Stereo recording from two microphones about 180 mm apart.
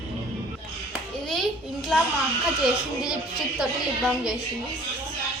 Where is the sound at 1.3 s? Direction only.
Centre (ahead or behind).